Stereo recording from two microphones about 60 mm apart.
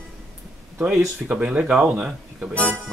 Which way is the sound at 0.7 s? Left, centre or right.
Centre.